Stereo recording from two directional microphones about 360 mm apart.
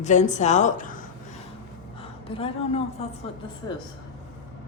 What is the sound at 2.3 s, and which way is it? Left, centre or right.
Speech, centre.